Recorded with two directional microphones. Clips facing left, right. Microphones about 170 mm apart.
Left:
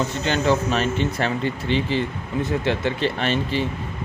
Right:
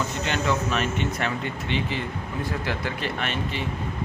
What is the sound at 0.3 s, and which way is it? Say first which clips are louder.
Speech: left 6 dB; 30° left (ahead or behind).